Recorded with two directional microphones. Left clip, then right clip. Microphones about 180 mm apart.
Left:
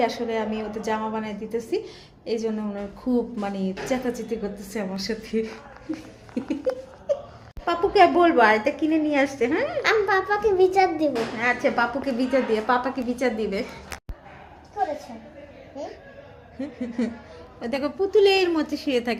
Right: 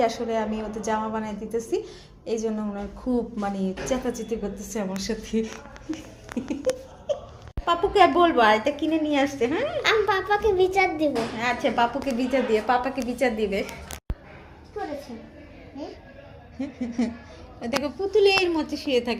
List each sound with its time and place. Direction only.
0.0 s a woman's voice: 10° left (ahead or behind)
6.4 s a woman's voice: 15° left (ahead or behind)
7.6 s a woman's voice: 20° left (ahead or behind)
11.1 s a woman's voice: 20° left (ahead or behind)
16.6 s a woman's voice: 20° left (ahead or behind)